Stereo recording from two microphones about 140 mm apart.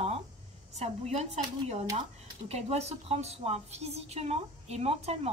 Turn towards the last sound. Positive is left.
turn(degrees=-50)  # may be behind; listen again after turning